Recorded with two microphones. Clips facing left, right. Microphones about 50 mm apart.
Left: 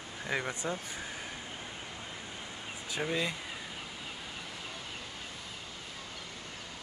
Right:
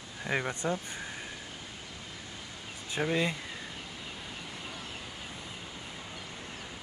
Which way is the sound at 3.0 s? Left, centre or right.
Centre.